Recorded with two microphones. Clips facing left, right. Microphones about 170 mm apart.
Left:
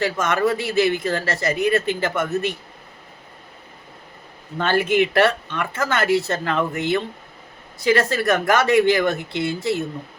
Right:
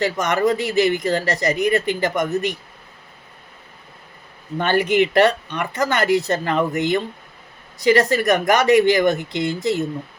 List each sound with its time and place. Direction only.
0.0 s speech: 20° right (ahead or behind)
4.5 s speech: 15° right (ahead or behind)